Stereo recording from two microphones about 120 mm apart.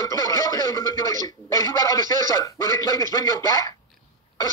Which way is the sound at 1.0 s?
30° left (ahead or behind).